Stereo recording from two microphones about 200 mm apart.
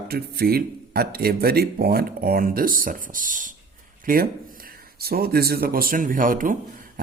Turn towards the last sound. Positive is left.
turn(degrees=-40)  # may be behind; listen again after turning